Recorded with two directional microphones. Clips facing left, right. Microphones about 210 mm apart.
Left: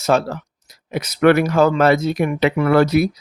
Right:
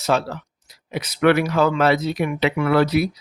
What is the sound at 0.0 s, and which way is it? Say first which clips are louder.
Speech: left 4 dB; 45° left (ahead or behind).